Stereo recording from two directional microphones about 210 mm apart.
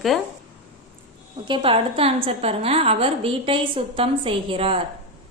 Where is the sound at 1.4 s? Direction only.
25° right (ahead or behind).